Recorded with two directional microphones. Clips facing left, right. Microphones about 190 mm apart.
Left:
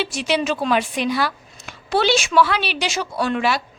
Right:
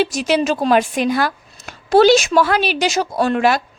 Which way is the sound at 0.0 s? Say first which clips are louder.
Right 5 dB; 40° right (ahead or behind).